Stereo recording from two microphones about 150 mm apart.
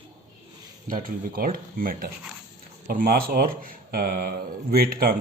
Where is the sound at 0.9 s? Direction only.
70° right (ahead or behind).